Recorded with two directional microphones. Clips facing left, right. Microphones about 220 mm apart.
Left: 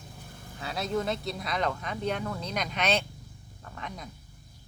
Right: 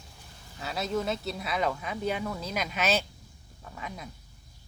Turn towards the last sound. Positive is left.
turn(degrees=-5)  # may be behind; listen again after turning